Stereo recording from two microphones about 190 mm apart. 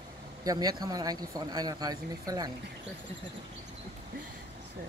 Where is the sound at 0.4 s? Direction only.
20° right (ahead or behind).